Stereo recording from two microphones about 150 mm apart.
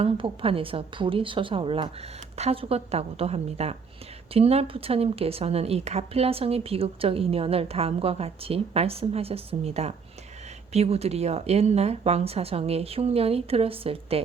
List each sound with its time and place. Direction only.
0.0 s speech: 40° right (ahead or behind)